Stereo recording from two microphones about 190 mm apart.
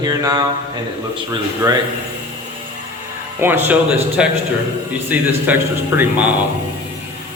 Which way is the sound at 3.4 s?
10° right (ahead or behind).